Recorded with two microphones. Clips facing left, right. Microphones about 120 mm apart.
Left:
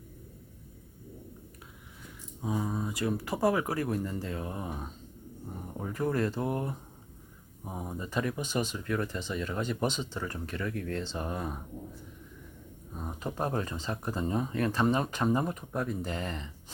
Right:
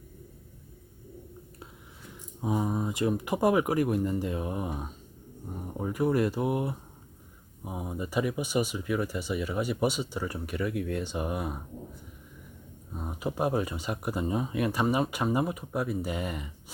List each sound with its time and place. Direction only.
2.4 s speech: 20° right (ahead or behind)
12.9 s speech: 5° right (ahead or behind)